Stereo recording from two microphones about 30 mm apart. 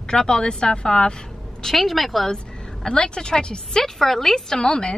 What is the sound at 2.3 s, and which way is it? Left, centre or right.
A woman's voice, left.